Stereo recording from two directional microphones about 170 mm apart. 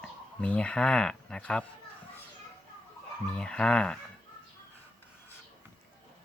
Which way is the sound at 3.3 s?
5° left (ahead or behind).